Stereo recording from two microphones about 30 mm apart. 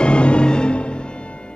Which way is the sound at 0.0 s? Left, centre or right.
Left.